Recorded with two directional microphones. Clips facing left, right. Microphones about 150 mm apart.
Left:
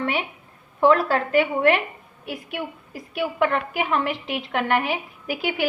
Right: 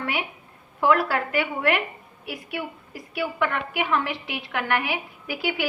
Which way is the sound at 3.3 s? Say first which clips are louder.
Left 5 dB; 35° left (ahead or behind).